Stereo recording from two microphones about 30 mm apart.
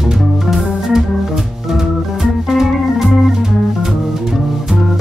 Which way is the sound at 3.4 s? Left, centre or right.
Centre.